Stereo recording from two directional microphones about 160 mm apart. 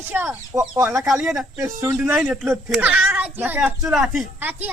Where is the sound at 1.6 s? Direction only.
20° right (ahead or behind).